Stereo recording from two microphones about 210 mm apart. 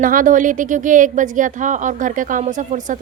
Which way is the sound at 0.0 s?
40° right (ahead or behind).